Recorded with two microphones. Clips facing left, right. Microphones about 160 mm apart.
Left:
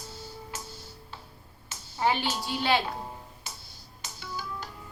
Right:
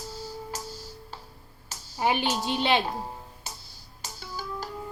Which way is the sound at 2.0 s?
15° right (ahead or behind).